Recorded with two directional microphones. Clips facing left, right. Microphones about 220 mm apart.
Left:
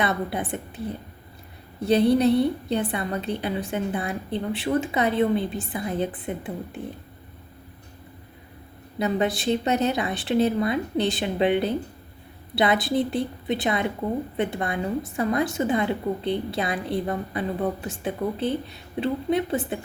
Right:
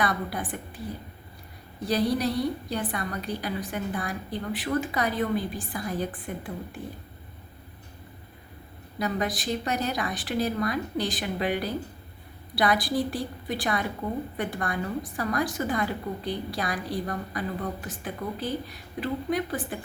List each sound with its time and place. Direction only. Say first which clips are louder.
0.0 s a woman's voice: left 3 dB; 25° left (ahead or behind)
1.8 s a woman's voice: left 7 dB; 25° left (ahead or behind)
9.0 s a woman's voice: left 5 dB; 25° left (ahead or behind)